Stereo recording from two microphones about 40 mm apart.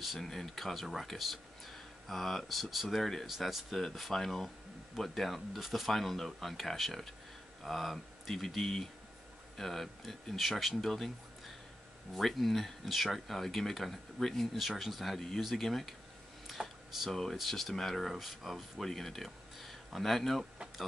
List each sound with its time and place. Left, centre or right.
0.0 s speech: centre
3.3 s speech: centre
16.5 s a sound: centre
17.1 s speech: centre
18.1 s speech: centre